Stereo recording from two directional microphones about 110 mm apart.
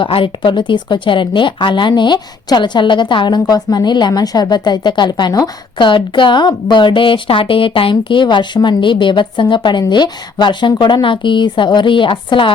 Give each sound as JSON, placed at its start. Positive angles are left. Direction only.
{"t": 0.0, "sound": "speech", "side_deg": 50}